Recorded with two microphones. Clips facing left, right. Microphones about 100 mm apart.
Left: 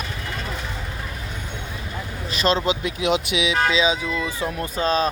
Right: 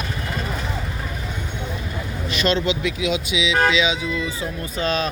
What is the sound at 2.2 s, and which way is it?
Speech, 35° left (ahead or behind).